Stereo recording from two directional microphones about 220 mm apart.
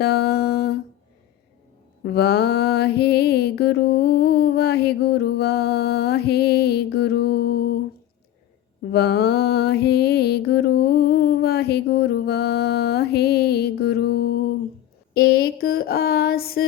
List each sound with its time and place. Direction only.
0.0 s mantra: 45° left (ahead or behind)
2.0 s mantra: 45° left (ahead or behind)
8.9 s mantra: 50° left (ahead or behind)
15.1 s a sound: 45° left (ahead or behind)